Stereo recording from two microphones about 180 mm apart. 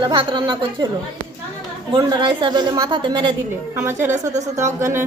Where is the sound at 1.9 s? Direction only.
25° right (ahead or behind).